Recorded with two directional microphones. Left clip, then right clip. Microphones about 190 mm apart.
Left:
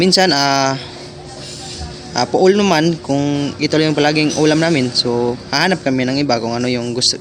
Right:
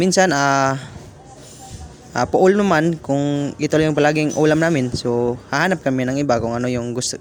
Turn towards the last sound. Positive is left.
turn(degrees=-40)  # may be behind; listen again after turning